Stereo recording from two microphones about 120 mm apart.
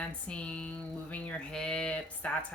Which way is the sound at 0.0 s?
10° left (ahead or behind).